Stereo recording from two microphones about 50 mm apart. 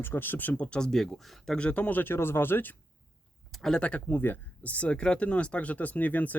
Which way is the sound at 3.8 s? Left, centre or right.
Left.